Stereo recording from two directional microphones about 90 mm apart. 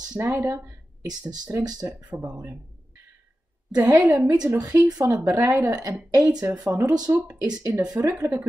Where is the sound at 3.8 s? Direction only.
20° right (ahead or behind).